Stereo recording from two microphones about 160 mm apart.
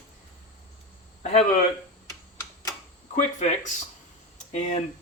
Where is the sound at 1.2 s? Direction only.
40° left (ahead or behind).